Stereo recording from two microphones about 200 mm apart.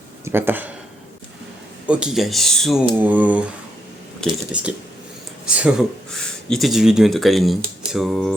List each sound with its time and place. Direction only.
0.3 s speech: 10° right (ahead or behind)
1.9 s speech: 5° right (ahead or behind)